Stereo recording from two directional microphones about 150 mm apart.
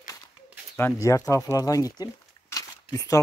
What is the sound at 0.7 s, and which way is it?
Speech, 15° left (ahead or behind).